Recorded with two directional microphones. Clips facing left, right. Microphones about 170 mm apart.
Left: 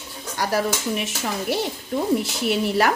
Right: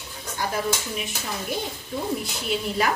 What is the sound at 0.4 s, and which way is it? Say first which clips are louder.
Speech: left 4 dB; 75° left (ahead or behind).